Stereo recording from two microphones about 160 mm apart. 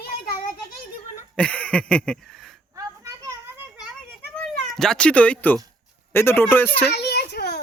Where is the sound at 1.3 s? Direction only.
10° left (ahead or behind).